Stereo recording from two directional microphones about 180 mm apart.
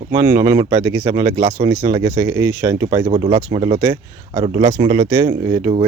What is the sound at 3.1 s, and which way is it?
Speech, 30° right (ahead or behind).